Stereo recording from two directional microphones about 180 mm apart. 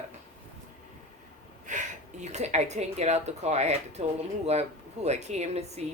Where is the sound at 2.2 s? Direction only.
40° right (ahead or behind).